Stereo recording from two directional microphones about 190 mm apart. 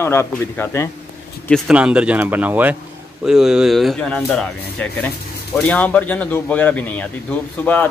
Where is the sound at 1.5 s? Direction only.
5° right (ahead or behind).